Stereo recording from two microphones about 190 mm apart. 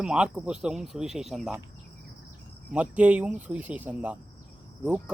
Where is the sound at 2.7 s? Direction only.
5° right (ahead or behind).